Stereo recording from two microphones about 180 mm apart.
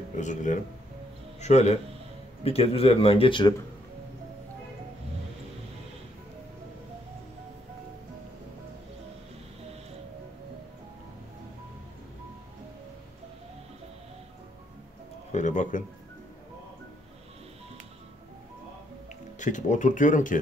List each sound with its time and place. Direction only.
0.2 s speech: 45° left (ahead or behind); by 3.5 s 25° left (ahead or behind)
15.3 s speech: 45° left (ahead or behind)
19.4 s speech: 45° left (ahead or behind)